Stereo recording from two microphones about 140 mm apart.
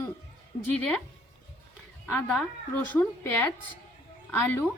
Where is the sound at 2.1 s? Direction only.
10° left (ahead or behind).